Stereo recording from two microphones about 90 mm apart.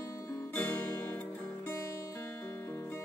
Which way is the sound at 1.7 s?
35° left (ahead or behind).